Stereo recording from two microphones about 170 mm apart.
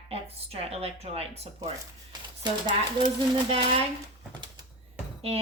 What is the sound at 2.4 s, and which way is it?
Speech, 25° right (ahead or behind).